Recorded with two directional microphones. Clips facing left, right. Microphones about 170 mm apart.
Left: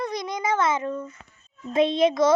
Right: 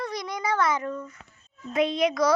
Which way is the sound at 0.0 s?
20° left (ahead or behind).